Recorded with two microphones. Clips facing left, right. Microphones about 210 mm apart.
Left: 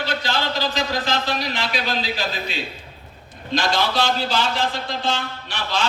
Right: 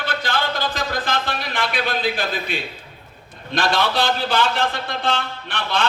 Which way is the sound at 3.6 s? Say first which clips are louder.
Right 1 dB; 60° right (ahead or behind).